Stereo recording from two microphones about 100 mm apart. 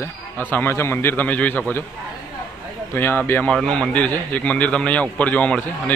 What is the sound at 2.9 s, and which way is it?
Speech, 20° left (ahead or behind).